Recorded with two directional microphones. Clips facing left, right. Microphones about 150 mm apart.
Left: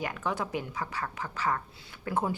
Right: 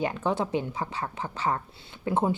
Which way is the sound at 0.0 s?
30° right (ahead or behind).